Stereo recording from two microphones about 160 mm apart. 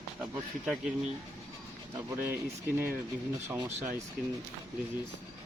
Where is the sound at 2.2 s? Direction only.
15° right (ahead or behind).